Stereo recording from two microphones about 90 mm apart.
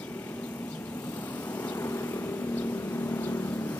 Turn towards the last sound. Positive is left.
turn(degrees=25)  # may be behind; listen again after turning